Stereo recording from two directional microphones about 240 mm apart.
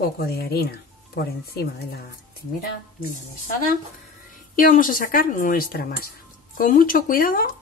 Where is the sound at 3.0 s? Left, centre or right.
Left.